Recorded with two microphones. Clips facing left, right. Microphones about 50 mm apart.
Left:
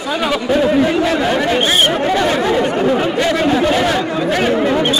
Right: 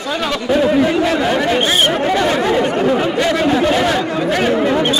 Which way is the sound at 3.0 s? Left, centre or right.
Centre.